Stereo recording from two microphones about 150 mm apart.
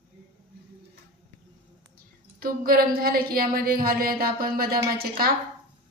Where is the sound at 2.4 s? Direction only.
75° right (ahead or behind).